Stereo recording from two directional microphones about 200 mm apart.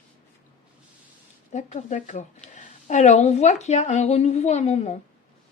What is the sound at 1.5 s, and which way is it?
Speech, 35° left (ahead or behind).